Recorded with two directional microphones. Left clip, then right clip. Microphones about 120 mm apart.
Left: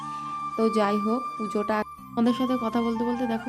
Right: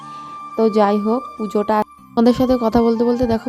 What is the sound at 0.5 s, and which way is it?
Speech, 40° right (ahead or behind).